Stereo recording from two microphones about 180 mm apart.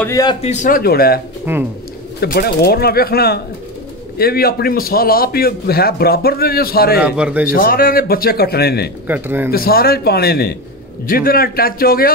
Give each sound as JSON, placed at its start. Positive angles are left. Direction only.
{"t": 0.0, "sound": "speech", "side_deg": 20}
{"t": 0.4, "sound": "speech", "side_deg": 40}
{"t": 1.5, "sound": "speech", "side_deg": -10}
{"t": 2.1, "sound": "a man's voice", "side_deg": 60}
{"t": 7.0, "sound": "a man's voice", "side_deg": -5}
{"t": 7.4, "sound": "a man's voice", "side_deg": 55}
{"t": 9.0, "sound": "speech", "side_deg": -10}
{"t": 9.5, "sound": "a man's voice", "side_deg": 55}